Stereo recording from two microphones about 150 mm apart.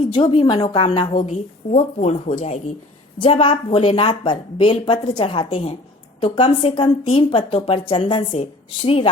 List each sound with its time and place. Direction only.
0.1 s a woman's voice: 35° left (ahead or behind)
1.2 s a woman's voice: 50° left (ahead or behind)